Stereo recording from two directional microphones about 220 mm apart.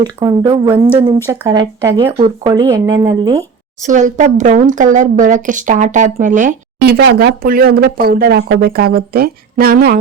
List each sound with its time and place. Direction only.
0.0 s speech: 20° right (ahead or behind)
2.1 s speech: 25° right (ahead or behind)
3.8 s speech: 35° right (ahead or behind)